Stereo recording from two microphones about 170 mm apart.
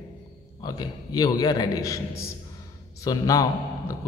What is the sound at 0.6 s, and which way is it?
A woman's voice, 25° left (ahead or behind).